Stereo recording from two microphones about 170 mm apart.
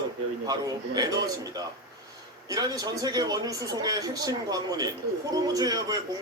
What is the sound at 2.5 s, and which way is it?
Speech, 20° right (ahead or behind).